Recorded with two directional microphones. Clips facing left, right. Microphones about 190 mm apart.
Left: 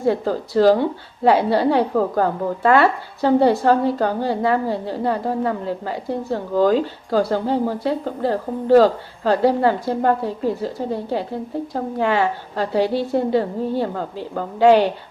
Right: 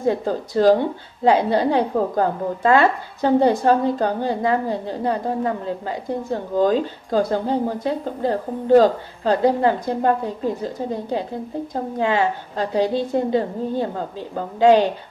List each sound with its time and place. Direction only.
0.0 s a woman's voice: 20° right (ahead or behind)